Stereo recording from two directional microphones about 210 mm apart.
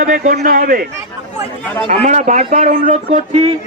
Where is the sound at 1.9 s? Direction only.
35° right (ahead or behind).